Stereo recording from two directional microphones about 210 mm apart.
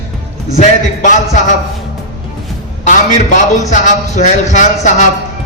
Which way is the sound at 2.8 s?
35° left (ahead or behind).